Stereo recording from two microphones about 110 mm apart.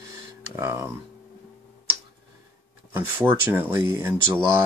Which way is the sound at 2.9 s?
20° right (ahead or behind).